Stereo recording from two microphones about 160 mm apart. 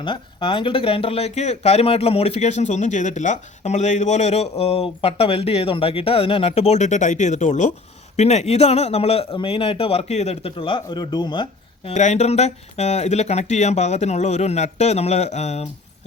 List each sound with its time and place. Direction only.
0.0 s speech: 30° left (ahead or behind)
11.9 s speech: 45° left (ahead or behind)